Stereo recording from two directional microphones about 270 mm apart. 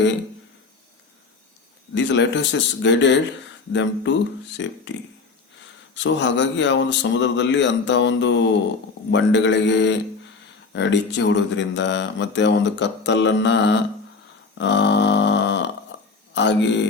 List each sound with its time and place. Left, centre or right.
2.0 s speech: left
14.6 s a sound: left
16.3 s speech: left